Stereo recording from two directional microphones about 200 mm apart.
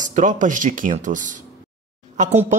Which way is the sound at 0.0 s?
40° right (ahead or behind).